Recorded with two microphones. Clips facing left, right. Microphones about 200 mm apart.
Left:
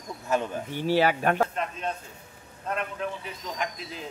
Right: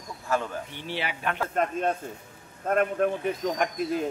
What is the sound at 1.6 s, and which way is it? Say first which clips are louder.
Speech: right 6 dB; 50° right (ahead or behind).